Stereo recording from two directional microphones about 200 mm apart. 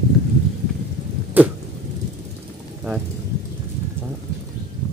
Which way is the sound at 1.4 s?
10° right (ahead or behind).